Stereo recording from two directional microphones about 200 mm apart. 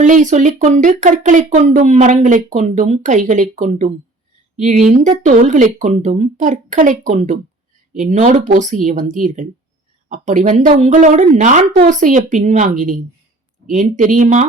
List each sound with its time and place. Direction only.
0.0 s speech: 40° right (ahead or behind)